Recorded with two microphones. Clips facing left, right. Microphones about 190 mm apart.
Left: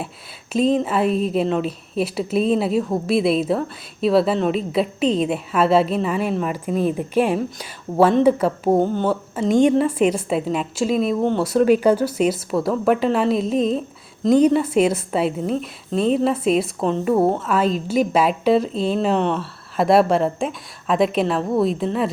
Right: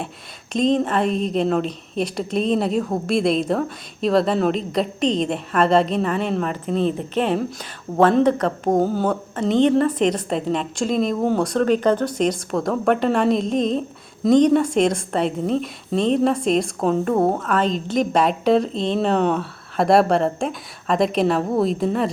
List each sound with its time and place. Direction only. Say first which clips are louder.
0.5 s a woman's voice: even; 5° left (ahead or behind)
8.8 s a woman's voice: even; 5° right (ahead or behind)
9.0 s a woman's voice: left 1 dB; 5° left (ahead or behind)